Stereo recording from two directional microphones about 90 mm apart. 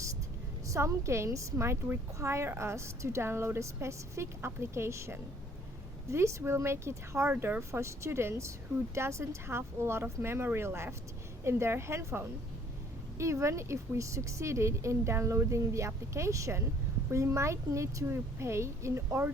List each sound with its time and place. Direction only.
0.7 s a woman's voice: 30° right (ahead or behind)